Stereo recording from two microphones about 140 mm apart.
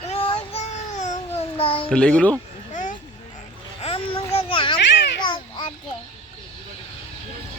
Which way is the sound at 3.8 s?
45° left (ahead or behind).